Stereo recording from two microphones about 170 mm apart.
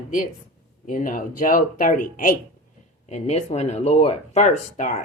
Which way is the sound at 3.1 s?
40° left (ahead or behind).